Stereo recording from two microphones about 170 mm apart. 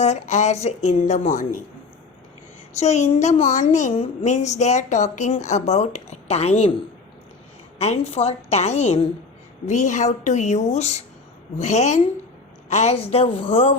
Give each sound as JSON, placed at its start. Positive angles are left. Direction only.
{"t": 0.0, "sound": "a woman's voice", "side_deg": 45}
{"t": 2.7, "sound": "a woman's voice", "side_deg": 40}
{"t": 7.8, "sound": "a woman's voice", "side_deg": 40}